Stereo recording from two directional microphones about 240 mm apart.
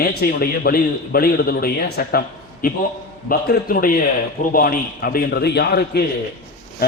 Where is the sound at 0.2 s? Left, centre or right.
Left.